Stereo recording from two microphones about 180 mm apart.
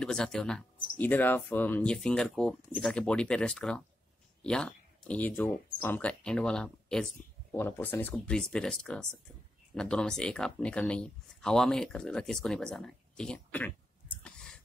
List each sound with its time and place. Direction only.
0.0 s speech: 5° left (ahead or behind)